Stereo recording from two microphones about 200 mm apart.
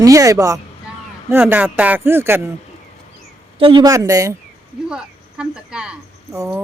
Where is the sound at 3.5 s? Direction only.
25° right (ahead or behind).